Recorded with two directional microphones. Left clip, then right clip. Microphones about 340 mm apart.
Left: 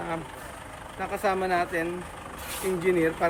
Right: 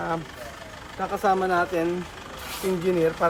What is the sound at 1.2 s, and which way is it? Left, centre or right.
Speech, centre.